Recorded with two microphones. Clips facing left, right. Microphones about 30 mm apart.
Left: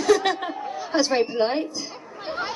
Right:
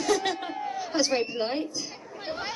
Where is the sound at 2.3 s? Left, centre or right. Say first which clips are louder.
Left 5 dB; centre.